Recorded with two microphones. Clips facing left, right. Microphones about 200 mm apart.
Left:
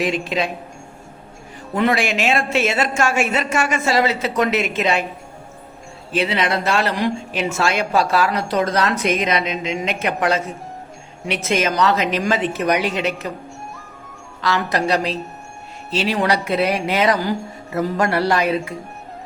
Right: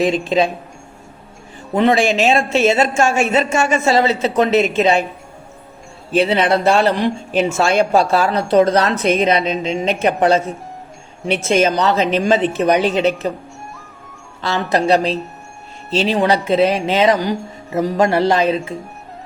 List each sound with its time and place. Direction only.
0.0 s speech: 30° right (ahead or behind)
1.7 s speech: 25° right (ahead or behind)
6.1 s speech: 30° right (ahead or behind)
6.9 s speech: centre (ahead or behind)
7.5 s speech: 30° right (ahead or behind)
11.4 s speech: 30° right (ahead or behind)
14.4 s speech: 30° right (ahead or behind)